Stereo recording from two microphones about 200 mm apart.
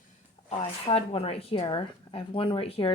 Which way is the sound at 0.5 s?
30° left (ahead or behind).